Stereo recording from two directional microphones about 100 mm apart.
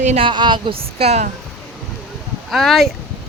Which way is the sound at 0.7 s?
85° right.